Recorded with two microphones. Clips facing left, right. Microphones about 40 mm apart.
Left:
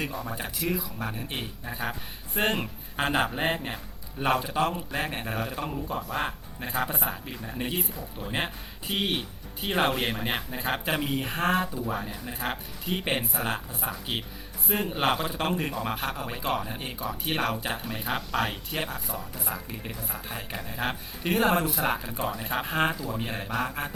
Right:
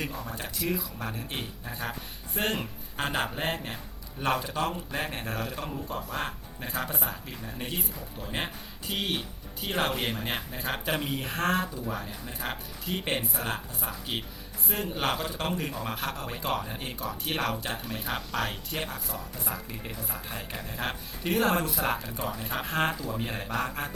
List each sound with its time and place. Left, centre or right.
0.0 s speech: centre